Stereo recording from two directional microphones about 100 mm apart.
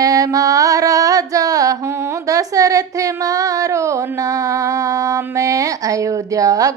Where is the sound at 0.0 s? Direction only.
35° right (ahead or behind).